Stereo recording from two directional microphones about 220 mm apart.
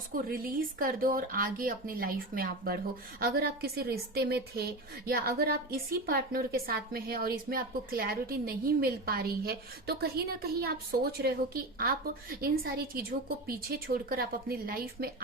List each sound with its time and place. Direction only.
0.3 s a woman's voice: 40° right (ahead or behind)